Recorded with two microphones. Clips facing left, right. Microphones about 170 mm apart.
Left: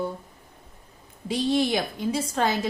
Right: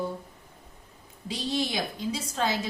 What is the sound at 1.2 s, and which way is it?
A woman's voice, 55° left (ahead or behind).